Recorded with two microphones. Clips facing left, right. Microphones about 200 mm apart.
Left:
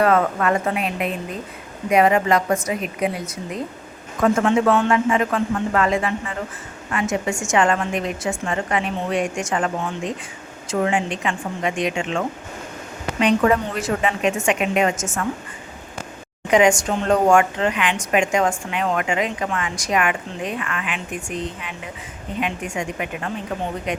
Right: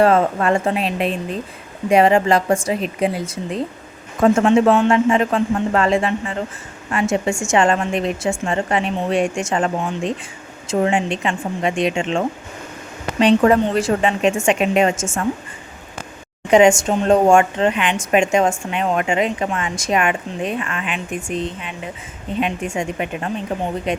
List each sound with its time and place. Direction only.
0.0 s speech: 30° right (ahead or behind)
16.5 s speech: 25° right (ahead or behind)